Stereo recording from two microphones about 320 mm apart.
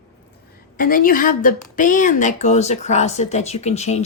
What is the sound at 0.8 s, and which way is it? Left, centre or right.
A woman's voice, left.